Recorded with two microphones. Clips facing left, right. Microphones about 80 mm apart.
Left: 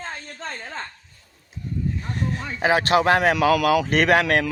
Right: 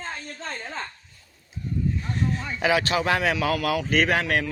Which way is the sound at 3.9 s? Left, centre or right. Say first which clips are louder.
Left 4 dB; left.